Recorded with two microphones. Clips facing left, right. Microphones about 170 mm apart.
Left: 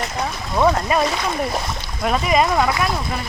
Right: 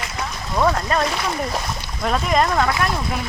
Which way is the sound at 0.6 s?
10° left (ahead or behind).